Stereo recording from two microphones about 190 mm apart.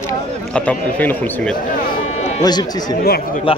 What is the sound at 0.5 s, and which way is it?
Speech, 5° left (ahead or behind).